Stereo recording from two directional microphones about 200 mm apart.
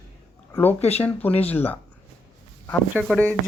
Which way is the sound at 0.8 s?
30° left (ahead or behind).